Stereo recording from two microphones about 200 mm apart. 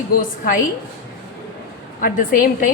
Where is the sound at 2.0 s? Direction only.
45° left (ahead or behind).